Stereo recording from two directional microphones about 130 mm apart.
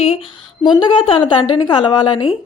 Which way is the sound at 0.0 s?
45° left (ahead or behind).